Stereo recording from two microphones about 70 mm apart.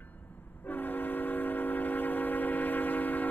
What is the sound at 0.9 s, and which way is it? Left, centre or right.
Train, left.